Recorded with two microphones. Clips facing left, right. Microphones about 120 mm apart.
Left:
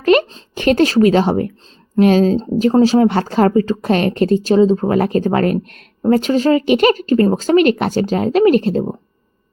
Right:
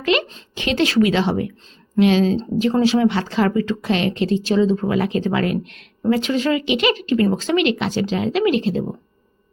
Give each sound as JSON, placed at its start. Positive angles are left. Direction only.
{"t": 0.0, "sound": "speech", "side_deg": 45}